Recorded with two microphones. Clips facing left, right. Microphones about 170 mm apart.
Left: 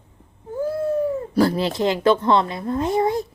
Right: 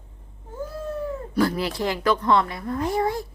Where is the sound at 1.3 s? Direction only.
30° left (ahead or behind).